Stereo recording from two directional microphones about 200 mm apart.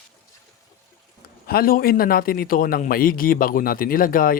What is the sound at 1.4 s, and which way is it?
A man's voice, 50° left (ahead or behind).